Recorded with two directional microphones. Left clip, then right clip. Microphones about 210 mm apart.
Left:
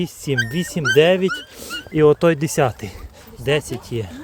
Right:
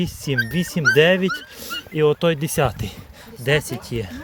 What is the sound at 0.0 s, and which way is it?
Speech, 10° left (ahead or behind).